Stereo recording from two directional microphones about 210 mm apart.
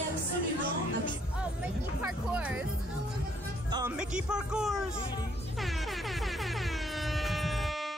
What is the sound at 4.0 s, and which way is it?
Speech, 5° right (ahead or behind).